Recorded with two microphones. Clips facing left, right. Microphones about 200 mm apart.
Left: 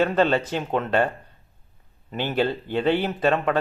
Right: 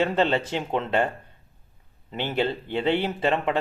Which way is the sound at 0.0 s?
20° right (ahead or behind).